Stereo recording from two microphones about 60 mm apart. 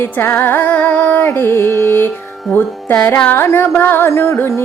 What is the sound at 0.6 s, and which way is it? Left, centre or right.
Music, left.